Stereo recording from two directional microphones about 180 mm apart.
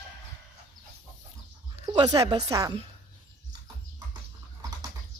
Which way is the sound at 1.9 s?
20° right (ahead or behind).